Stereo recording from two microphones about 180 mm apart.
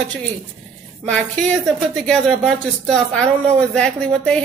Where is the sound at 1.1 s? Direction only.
5° left (ahead or behind).